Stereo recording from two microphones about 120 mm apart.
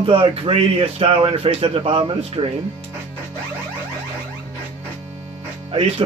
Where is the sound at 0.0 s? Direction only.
50° right (ahead or behind).